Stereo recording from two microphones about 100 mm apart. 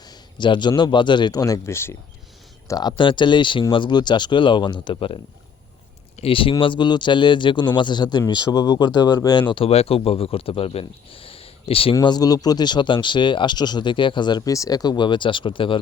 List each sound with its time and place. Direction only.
0.1 s a sound: 50° left (ahead or behind)
0.8 s speech: 50° left (ahead or behind); by 2.0 s 25° left (ahead or behind)
2.6 s speech: 40° left (ahead or behind)
9.6 s speech: 85° left; by 11.9 s 65° left (ahead or behind)
12.0 s speech: 40° left (ahead or behind); by 15.8 s 60° left (ahead or behind)